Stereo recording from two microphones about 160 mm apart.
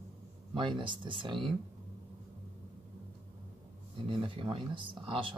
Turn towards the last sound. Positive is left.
turn(degrees=-35)  # may be behind; listen again after turning